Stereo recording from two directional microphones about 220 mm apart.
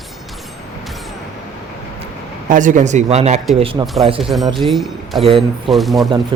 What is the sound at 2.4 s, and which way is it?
Speech, 35° right (ahead or behind).